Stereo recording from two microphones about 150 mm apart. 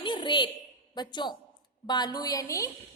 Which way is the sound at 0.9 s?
30° left (ahead or behind).